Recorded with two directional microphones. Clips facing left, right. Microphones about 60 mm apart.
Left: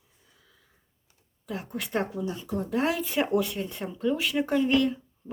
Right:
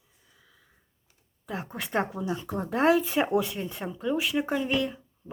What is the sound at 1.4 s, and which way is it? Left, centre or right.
Speech, right.